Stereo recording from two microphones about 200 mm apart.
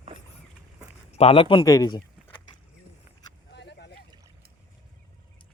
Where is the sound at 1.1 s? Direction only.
30° left (ahead or behind).